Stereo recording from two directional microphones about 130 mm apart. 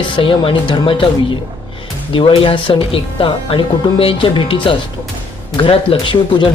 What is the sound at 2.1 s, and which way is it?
Speech, 40° left (ahead or behind).